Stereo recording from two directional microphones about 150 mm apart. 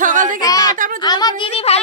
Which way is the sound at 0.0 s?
60° right (ahead or behind).